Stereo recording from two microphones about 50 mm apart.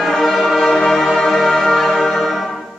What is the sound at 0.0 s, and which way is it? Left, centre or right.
Music, centre.